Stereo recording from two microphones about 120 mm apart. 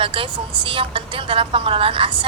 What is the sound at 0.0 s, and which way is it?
A woman's voice, 45° right (ahead or behind).